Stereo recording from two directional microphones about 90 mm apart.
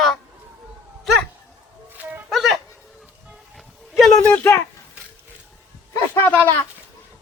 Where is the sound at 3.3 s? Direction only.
Centre (ahead or behind).